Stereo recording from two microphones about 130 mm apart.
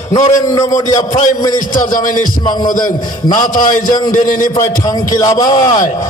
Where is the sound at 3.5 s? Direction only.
90° left.